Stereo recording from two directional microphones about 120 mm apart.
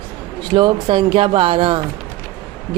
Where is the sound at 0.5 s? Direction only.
40° right (ahead or behind).